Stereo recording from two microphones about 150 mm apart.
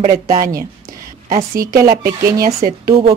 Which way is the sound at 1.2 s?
55° right (ahead or behind).